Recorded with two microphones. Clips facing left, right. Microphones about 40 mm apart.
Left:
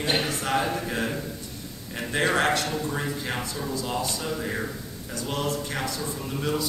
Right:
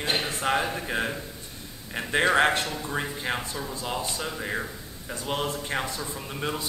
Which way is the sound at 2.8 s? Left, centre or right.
Centre.